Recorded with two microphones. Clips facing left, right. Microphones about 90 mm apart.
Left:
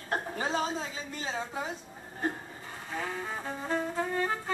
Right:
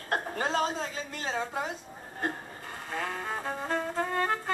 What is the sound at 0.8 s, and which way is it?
Speech, 60° right (ahead or behind).